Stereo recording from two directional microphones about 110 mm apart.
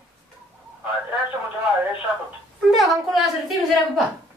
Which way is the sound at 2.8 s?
Centre (ahead or behind).